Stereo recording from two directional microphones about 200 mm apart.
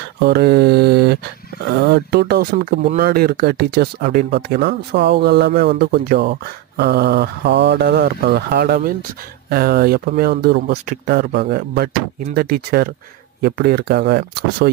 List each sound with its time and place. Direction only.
0.3 s speech: 55° right (ahead or behind)